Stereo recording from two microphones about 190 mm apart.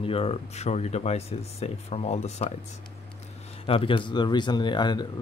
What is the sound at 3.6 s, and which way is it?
Speech, 30° left (ahead or behind).